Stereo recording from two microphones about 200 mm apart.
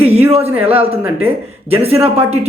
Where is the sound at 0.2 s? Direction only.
15° right (ahead or behind).